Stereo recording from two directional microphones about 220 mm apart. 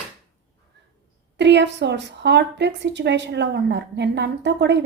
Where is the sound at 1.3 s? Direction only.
50° right (ahead or behind).